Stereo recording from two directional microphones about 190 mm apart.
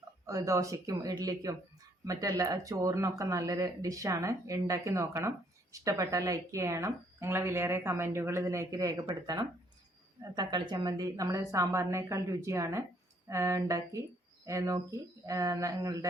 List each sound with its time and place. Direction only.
0.3 s a woman's voice: 15° right (ahead or behind)